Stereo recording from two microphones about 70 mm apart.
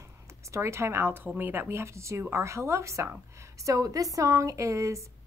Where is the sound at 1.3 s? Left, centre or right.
Right.